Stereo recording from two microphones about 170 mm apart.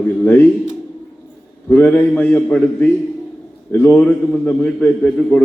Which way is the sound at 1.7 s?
10° left (ahead or behind).